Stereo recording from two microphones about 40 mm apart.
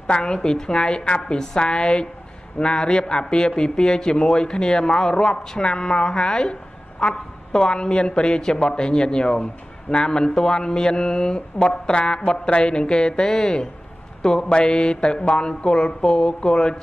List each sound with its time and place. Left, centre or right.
0.1 s a woman's voice: left